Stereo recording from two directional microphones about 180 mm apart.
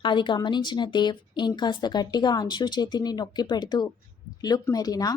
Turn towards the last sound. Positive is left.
turn(degrees=20)  # may be behind; listen again after turning